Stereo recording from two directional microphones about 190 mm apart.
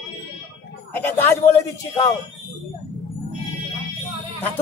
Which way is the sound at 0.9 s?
10° left (ahead or behind).